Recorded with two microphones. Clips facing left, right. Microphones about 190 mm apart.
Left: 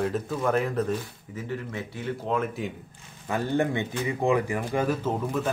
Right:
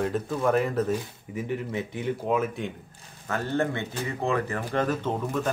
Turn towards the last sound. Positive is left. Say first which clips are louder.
# even
turn(degrees=5)  # may be behind; listen again after turning